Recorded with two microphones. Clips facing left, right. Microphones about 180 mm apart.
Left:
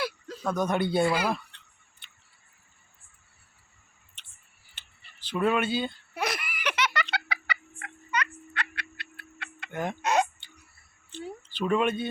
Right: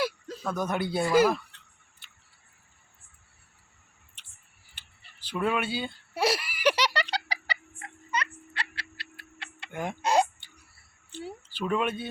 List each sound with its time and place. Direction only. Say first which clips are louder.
0.5 s speech: left 3 dB; 5° right (ahead or behind)
1.3 s a sound: right 1 dB; 5° right (ahead or behind)
4.7 s tick: even; 10° right (ahead or behind)
6.1 s giggle: right 6 dB; 30° right (ahead or behind)
9.7 s speech: left 2 dB; 10° right (ahead or behind)
10.0 s speech: right 2 dB; 30° right (ahead or behind)
11.1 s a sound: even; 10° right (ahead or behind)
11.7 s speech: left 3 dB; 5° right (ahead or behind)